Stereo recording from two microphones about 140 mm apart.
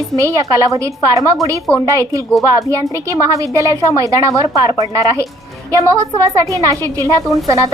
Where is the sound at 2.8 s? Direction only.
20° left (ahead or behind).